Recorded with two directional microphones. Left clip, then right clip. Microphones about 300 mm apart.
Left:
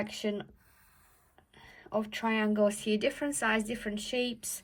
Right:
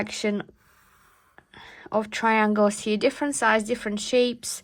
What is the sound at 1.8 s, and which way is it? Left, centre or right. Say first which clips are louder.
Speech: right 8 dB; right.